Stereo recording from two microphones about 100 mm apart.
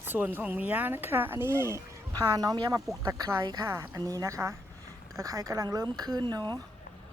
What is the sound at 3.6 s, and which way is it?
A woman's voice, 30° right (ahead or behind).